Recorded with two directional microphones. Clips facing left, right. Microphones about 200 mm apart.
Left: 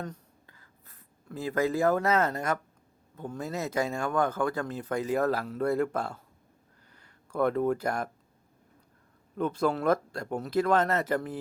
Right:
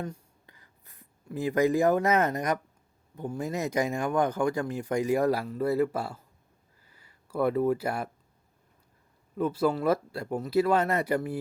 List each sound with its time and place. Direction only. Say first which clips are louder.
0.0 s writing: right 2 dB; 15° right (ahead or behind)
3.2 s speech: right 3 dB; 15° right (ahead or behind)
9.4 s speech: right 1 dB; 5° right (ahead or behind)